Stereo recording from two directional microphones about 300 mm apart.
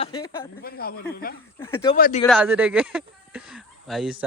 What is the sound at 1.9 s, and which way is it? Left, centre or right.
Speech, left.